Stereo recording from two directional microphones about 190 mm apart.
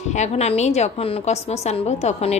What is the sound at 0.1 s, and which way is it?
A woman's voice, 35° left (ahead or behind).